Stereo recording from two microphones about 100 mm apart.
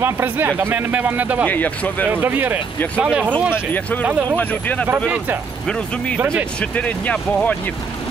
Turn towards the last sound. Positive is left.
turn(degrees=10)  # may be behind; listen again after turning